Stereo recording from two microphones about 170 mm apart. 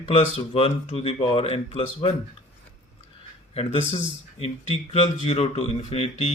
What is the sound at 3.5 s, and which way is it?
Speech, 40° left (ahead or behind).